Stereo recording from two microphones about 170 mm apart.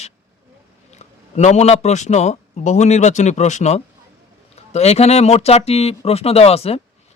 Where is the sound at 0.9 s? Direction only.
40° left (ahead or behind).